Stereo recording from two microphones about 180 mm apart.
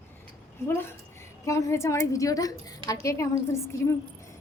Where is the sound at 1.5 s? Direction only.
15° left (ahead or behind).